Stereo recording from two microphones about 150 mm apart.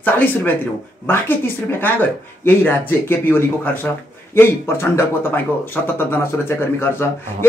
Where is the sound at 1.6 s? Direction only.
15° left (ahead or behind).